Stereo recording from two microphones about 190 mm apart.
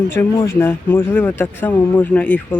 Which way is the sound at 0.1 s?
15° left (ahead or behind).